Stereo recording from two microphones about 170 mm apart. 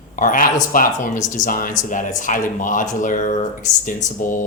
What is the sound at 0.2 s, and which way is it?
Speech, 50° left (ahead or behind).